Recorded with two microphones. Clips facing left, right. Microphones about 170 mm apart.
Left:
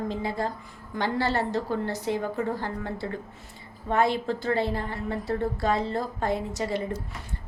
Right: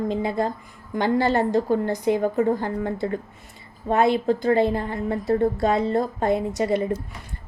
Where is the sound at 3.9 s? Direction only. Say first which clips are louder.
Right 5 dB; 20° right (ahead or behind).